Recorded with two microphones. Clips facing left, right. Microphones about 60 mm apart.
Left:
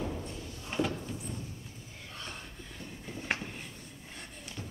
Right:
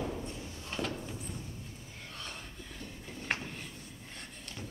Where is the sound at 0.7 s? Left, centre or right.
Left.